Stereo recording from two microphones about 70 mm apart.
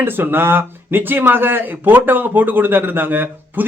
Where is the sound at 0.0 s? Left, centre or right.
Right.